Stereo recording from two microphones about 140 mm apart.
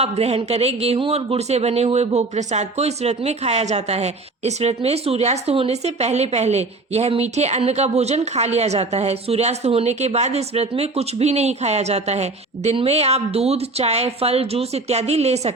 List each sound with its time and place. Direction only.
0.0 s speech: 50° right (ahead or behind)